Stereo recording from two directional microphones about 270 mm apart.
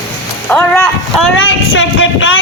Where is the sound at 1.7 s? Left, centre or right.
Left.